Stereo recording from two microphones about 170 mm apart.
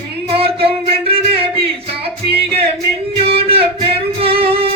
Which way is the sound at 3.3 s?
35° right (ahead or behind).